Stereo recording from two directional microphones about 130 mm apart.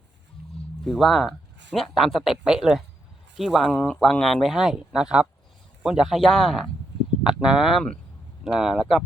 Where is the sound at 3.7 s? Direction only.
10° left (ahead or behind).